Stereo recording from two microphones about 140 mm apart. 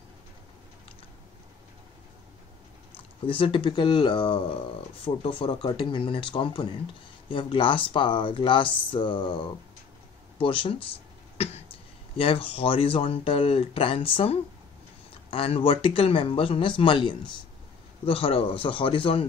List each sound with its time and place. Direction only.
3.3 s speech: 40° left (ahead or behind)
10.4 s speech: 35° left (ahead or behind)